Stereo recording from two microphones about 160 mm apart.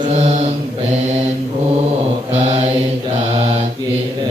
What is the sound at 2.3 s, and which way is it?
Mantra, 40° right (ahead or behind).